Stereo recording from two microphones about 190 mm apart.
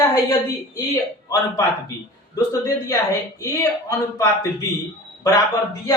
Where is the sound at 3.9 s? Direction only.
15° left (ahead or behind).